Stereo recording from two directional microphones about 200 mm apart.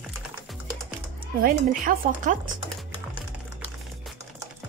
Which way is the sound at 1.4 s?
40° right (ahead or behind).